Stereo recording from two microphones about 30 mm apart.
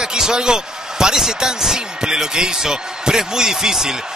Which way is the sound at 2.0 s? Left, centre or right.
Centre.